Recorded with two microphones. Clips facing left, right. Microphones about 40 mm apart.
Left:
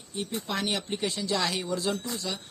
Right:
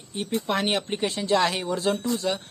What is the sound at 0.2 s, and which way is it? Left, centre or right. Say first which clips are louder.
Speech: right 6 dB; right.